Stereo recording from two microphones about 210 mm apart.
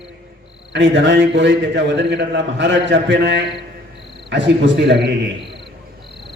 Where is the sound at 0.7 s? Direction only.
60° right (ahead or behind).